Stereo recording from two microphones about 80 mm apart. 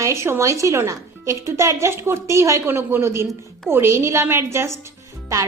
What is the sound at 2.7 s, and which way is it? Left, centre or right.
A woman's voice, right.